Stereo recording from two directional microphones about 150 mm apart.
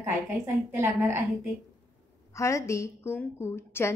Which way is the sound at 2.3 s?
20° left (ahead or behind).